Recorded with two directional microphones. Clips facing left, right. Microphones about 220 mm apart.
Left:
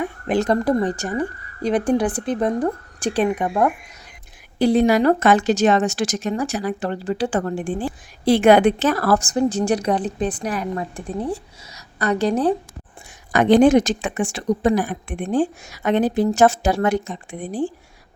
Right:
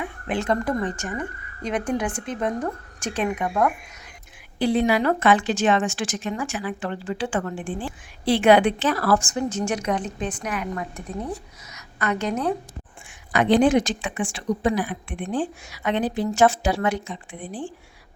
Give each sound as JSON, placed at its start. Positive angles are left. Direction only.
{"t": 0.0, "sound": "speech", "side_deg": 40}
{"t": 4.5, "sound": "speech", "side_deg": 40}
{"t": 13.3, "sound": "speech", "side_deg": 45}